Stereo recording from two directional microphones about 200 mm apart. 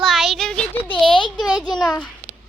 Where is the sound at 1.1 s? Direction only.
25° left (ahead or behind).